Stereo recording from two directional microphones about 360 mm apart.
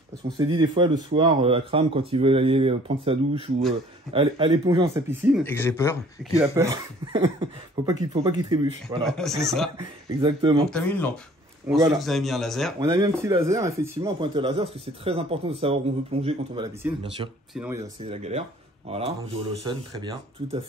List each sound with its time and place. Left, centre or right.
0.4 s speech: centre
5.4 s speech: centre
6.3 s speech: centre
9.0 s speech: centre
10.2 s speech: centre
10.7 s speech: centre
12.9 s speech: centre